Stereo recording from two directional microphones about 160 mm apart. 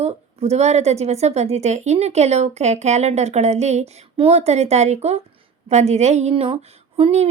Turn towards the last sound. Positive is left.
turn(degrees=-40)  # may be behind; listen again after turning